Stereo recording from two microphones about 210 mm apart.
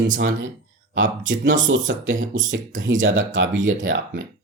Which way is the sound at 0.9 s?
65° right (ahead or behind).